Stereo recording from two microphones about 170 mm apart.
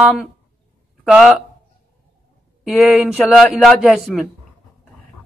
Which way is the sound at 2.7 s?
Centre (ahead or behind).